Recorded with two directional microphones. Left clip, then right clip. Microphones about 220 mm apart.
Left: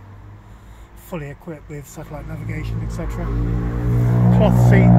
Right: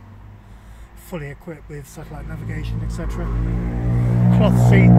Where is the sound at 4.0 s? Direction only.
50° left (ahead or behind).